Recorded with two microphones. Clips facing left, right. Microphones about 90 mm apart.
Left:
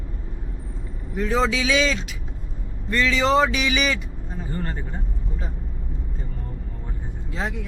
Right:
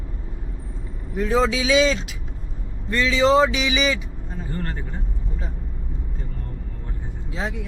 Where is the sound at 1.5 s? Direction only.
25° right (ahead or behind).